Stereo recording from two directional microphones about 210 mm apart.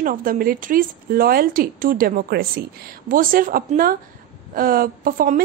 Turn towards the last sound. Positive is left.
turn(degrees=-40)  # may be behind; listen again after turning